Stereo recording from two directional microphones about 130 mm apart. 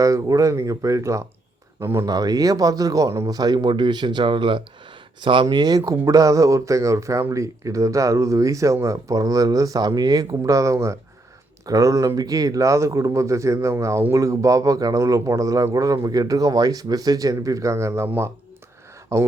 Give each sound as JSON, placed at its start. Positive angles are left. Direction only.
{"t": 0.0, "sound": "speech", "side_deg": -25}
{"t": 2.0, "sound": "speech", "side_deg": -30}